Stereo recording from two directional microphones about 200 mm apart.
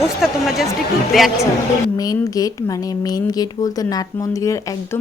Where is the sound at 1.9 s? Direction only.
20° left (ahead or behind).